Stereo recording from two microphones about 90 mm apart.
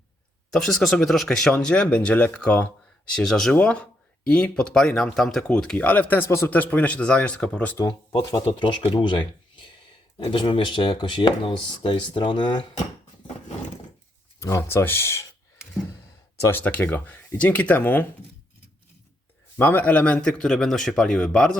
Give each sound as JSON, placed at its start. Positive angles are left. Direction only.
{"t": 0.5, "sound": "speech", "side_deg": 5}
{"t": 5.7, "sound": "speech", "side_deg": 20}
{"t": 6.5, "sound": "speech", "side_deg": 15}
{"t": 8.1, "sound": "speech", "side_deg": 55}
{"t": 14.3, "sound": "speech", "side_deg": 35}
{"t": 16.4, "sound": "speech", "side_deg": 25}
{"t": 19.5, "sound": "speech", "side_deg": 20}